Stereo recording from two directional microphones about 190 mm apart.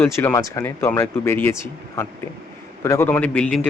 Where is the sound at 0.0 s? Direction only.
10° left (ahead or behind).